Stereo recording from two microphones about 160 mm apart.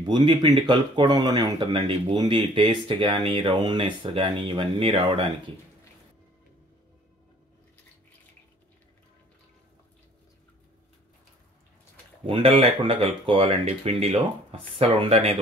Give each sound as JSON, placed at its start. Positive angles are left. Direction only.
{"t": 0.0, "sound": "speech", "side_deg": -30}
{"t": 12.3, "sound": "speech", "side_deg": -40}